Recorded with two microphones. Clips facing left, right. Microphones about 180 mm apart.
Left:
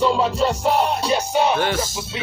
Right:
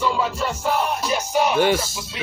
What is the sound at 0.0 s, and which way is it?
Music, 30° left (ahead or behind).